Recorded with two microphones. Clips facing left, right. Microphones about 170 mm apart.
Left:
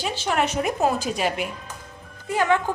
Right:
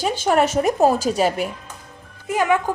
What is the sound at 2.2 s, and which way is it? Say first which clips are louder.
Speech: right 2 dB; 15° right (ahead or behind).